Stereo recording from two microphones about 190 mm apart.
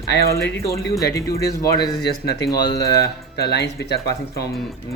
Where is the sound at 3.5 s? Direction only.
60° left (ahead or behind).